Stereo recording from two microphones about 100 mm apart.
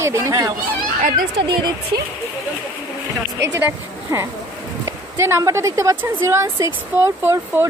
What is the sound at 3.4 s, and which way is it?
A woman's voice, 30° right (ahead or behind).